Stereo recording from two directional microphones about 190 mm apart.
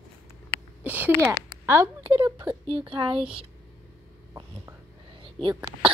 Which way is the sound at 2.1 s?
25° right (ahead or behind).